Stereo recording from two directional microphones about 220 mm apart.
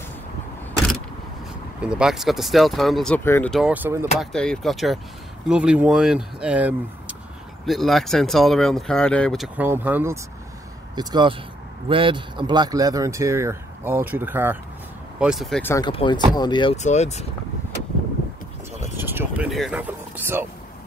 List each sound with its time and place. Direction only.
1.8 s speech: 5° right (ahead or behind)
4.2 s speech: 5° left (ahead or behind)
9.6 s speech: 10° right (ahead or behind)
11.0 s speech: 20° right (ahead or behind); by 15.7 s centre (ahead or behind)
15.7 s speech: 20° left (ahead or behind)
18.9 s speech: 10° right (ahead or behind)